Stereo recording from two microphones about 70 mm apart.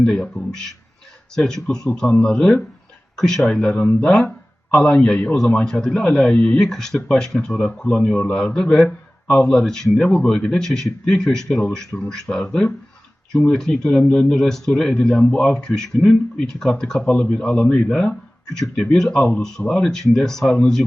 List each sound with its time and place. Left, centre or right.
0.0 s speech: centre
6.6 s speech: centre
7.9 s speech: left